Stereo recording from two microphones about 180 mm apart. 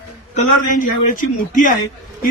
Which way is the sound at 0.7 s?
45° left (ahead or behind).